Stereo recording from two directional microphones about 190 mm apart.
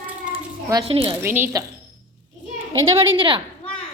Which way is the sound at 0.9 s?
30° right (ahead or behind).